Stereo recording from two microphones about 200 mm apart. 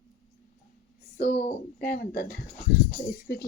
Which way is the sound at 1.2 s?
40° left (ahead or behind).